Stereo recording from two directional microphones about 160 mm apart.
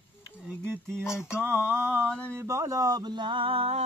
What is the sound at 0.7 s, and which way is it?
Mantra, 15° right (ahead or behind).